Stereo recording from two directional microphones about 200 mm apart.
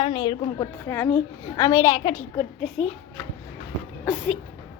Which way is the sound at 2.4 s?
Centre (ahead or behind).